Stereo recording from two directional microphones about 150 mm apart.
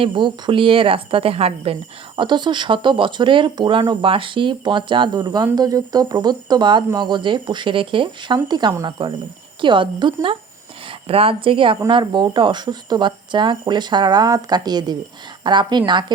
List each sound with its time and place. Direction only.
0.0 s speech: 35° right (ahead or behind)